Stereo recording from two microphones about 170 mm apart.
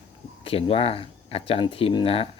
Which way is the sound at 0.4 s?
35° left (ahead or behind).